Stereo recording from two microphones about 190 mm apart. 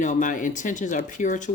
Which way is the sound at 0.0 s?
40° left (ahead or behind).